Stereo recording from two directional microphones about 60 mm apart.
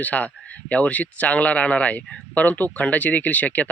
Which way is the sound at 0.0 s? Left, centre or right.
Left.